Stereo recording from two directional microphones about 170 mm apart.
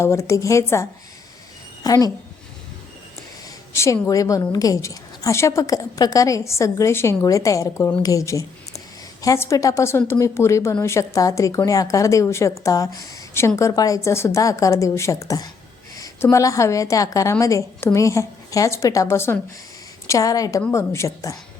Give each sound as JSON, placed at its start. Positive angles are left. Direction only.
{"t": 0.0, "sound": "a woman's voice", "side_deg": 15}
{"t": 3.8, "sound": "a woman's voice", "side_deg": 15}